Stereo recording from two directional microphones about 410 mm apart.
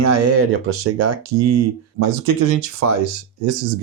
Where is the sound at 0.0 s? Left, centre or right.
Right.